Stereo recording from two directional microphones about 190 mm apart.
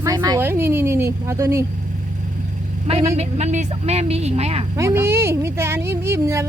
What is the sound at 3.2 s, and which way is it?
A woman's voice, 35° right (ahead or behind).